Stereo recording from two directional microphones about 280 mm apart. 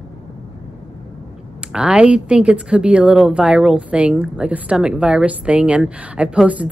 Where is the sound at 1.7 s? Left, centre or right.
Centre.